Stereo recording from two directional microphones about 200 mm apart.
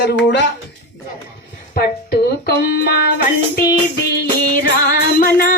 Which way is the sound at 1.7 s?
50° left (ahead or behind).